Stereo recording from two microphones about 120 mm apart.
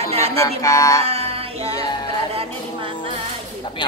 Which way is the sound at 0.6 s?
25° left (ahead or behind).